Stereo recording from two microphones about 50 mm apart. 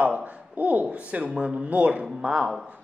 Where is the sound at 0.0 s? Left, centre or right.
Right.